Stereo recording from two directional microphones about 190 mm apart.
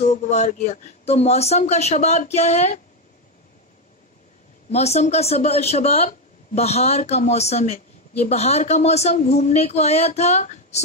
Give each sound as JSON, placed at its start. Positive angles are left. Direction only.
{"t": 0.0, "sound": "speech", "side_deg": 35}
{"t": 4.6, "sound": "speech", "side_deg": 35}